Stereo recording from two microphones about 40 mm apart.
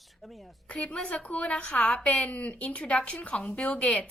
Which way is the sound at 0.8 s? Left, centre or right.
Centre.